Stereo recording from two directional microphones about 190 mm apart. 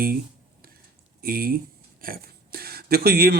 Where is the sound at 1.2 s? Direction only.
50° right (ahead or behind).